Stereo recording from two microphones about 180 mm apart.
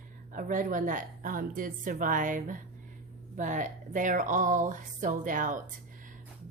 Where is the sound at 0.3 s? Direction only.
50° right (ahead or behind).